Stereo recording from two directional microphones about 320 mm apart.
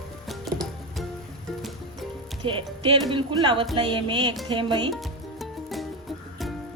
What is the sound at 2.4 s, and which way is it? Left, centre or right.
Music, centre.